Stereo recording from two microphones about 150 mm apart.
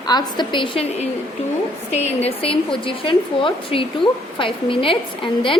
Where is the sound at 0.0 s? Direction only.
30° left (ahead or behind).